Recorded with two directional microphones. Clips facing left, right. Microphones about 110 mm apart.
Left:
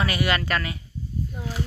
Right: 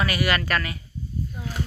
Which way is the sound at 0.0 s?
25° left (ahead or behind).